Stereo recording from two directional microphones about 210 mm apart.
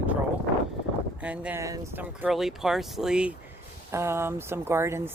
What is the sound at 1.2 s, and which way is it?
Speech, 5° right (ahead or behind).